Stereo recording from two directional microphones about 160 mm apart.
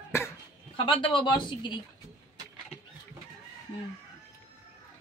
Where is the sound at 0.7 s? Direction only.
30° left (ahead or behind).